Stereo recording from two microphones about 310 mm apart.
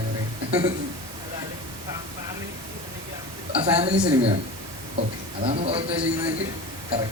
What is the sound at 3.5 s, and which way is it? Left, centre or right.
Speech, centre.